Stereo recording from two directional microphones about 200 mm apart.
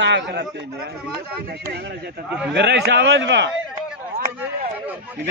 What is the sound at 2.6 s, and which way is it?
Speech, 55° right (ahead or behind).